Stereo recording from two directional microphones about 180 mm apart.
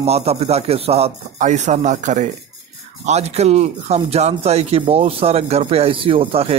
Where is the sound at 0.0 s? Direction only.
35° right (ahead or behind).